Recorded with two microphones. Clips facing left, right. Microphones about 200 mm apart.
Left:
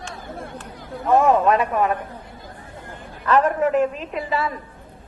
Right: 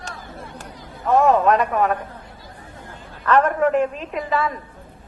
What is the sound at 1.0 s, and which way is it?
Speech, centre (ahead or behind).